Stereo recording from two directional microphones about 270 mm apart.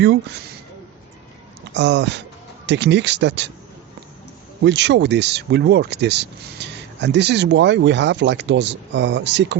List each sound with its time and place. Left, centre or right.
0.0 s speech: right
1.7 s speech: right
4.6 s speech: right